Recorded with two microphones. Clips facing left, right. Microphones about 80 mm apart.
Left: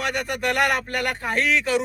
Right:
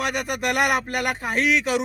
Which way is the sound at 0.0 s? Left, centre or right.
Centre.